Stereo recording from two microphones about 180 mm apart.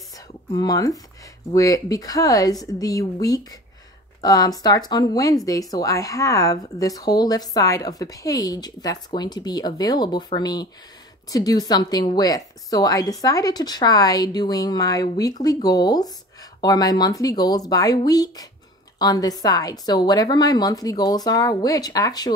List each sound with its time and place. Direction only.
0.5 s speech: 20° left (ahead or behind)